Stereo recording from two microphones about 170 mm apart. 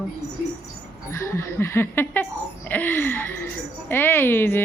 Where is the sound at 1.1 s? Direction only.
15° left (ahead or behind).